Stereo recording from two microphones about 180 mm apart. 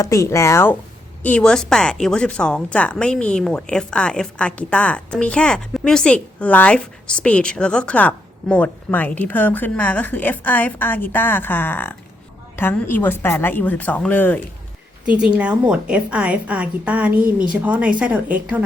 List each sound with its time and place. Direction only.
0.0 s a woman's voice: 15° left (ahead or behind)
15.0 s a woman's voice: 5° right (ahead or behind)